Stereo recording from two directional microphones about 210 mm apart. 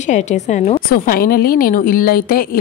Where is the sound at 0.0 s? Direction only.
35° left (ahead or behind).